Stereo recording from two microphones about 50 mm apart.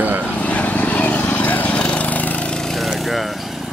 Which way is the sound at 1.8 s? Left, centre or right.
Left.